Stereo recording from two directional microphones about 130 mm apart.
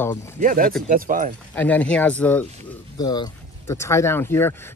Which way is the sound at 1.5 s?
10° left (ahead or behind).